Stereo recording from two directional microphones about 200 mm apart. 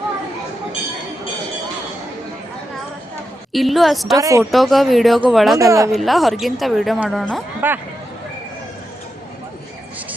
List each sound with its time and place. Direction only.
3.5 s a woman's voice: centre (ahead or behind)
4.2 s a woman's voice: 15° right (ahead or behind)
4.5 s a woman's voice: centre (ahead or behind)
5.5 s a woman's voice: 15° right (ahead or behind)
5.9 s a woman's voice: centre (ahead or behind)
7.6 s a woman's voice: 10° right (ahead or behind)